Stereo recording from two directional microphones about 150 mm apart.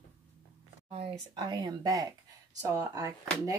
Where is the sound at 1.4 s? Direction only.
25° right (ahead or behind).